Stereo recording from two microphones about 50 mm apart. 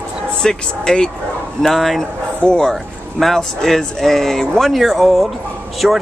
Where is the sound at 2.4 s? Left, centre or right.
Centre.